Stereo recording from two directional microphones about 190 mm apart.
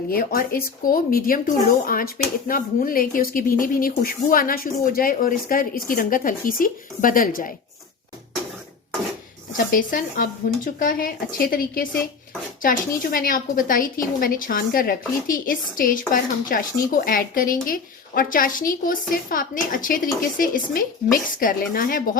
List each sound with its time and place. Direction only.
0.1 s a woman's voice: 50° left (ahead or behind)
9.7 s a woman's voice: 45° left (ahead or behind)